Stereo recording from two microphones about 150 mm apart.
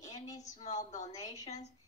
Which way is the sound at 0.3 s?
25° left (ahead or behind).